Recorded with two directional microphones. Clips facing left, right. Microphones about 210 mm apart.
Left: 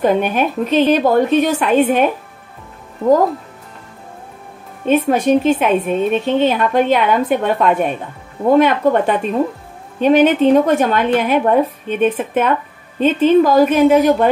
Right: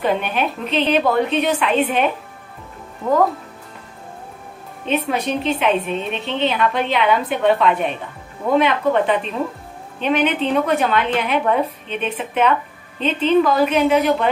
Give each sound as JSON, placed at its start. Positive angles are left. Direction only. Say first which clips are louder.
{"t": 0.0, "sound": "a woman's voice", "louder": "left 5 dB", "side_deg": 45}
{"t": 4.8, "sound": "a woman's voice", "louder": "left 7 dB", "side_deg": 45}